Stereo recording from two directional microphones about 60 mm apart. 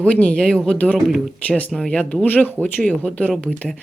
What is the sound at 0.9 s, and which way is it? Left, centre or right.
Speech, centre.